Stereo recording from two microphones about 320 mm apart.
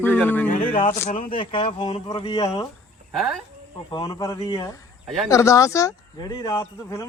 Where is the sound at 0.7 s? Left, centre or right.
Centre.